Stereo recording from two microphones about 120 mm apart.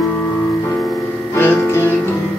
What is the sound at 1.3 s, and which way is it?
Music, 15° left (ahead or behind).